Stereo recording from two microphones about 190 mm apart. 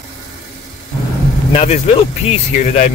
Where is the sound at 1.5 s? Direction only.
35° left (ahead or behind).